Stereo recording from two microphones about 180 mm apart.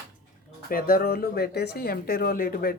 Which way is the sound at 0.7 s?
55° left (ahead or behind).